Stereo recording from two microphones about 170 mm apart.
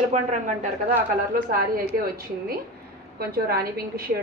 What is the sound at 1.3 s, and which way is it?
Speech, 55° right (ahead or behind).